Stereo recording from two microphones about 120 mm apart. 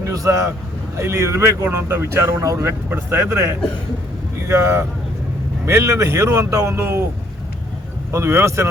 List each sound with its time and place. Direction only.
0.0 s speech: 25° right (ahead or behind)
8.1 s speech: 20° right (ahead or behind)